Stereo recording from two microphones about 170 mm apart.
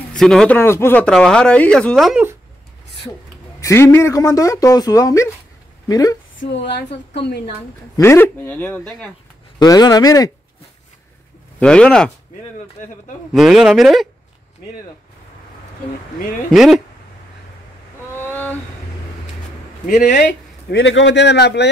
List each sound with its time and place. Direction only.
0.1 s speech: 5° left (ahead or behind)
3.6 s a woman's voice: 15° left (ahead or behind)
6.5 s speech: 90° left
7.9 s speech: 15° left (ahead or behind)
9.6 s speech: 25° left (ahead or behind)
11.6 s speech: 5° left (ahead or behind)
12.8 s a man's voice: 50° left (ahead or behind)
13.3 s speech: centre (ahead or behind)
16.4 s speech: centre (ahead or behind)
18.1 s vehicle: 10° left (ahead or behind)
19.9 s a man's voice: 50° left (ahead or behind)
20.8 s a man's voice: 90° left